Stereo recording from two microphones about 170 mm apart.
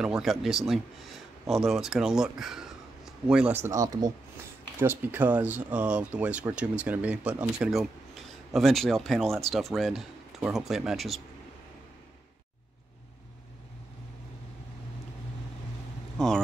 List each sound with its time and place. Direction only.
0.0 s speech: centre (ahead or behind)
3.6 s speech: 20° right (ahead or behind); by 11.1 s centre (ahead or behind)